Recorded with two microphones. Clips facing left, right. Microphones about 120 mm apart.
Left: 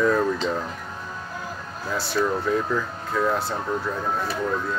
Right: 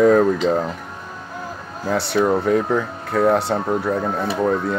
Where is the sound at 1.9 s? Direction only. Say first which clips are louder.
Right 6 dB; 65° right (ahead or behind).